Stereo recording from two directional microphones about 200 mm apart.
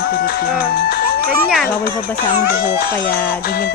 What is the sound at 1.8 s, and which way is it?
Speech, 45° left (ahead or behind).